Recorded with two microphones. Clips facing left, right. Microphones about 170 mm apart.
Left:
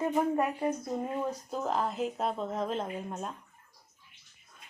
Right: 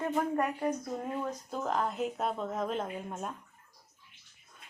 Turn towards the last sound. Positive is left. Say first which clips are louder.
# left 1 dB
turn(degrees=0)  # may be behind; listen again after turning